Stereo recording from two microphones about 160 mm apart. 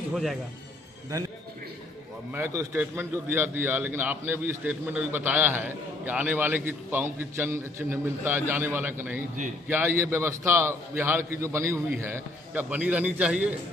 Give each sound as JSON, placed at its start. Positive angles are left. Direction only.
{"t": 0.1, "sound": "speech", "side_deg": 0}
{"t": 1.1, "sound": "a man's voice", "side_deg": -20}
{"t": 2.3, "sound": "a man's voice", "side_deg": -15}